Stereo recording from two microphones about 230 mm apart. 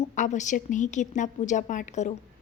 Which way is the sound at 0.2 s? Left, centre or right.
Left.